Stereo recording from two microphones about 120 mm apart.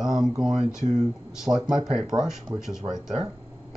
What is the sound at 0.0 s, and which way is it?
Speech, 5° right (ahead or behind).